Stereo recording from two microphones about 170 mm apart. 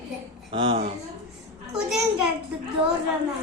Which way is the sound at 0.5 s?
35° right (ahead or behind).